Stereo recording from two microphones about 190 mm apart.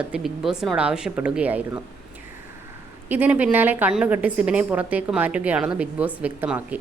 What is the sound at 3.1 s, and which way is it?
A woman's voice, 10° right (ahead or behind).